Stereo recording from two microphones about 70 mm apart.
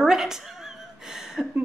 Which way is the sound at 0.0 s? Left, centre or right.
Centre.